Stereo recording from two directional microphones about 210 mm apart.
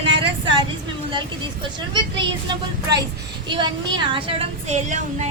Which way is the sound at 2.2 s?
20° right (ahead or behind).